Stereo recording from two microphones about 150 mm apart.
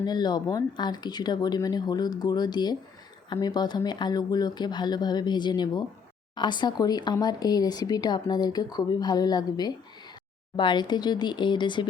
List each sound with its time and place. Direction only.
0.0 s speech: 30° left (ahead or behind)